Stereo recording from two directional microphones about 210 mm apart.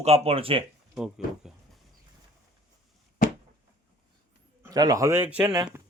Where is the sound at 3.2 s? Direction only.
40° left (ahead or behind).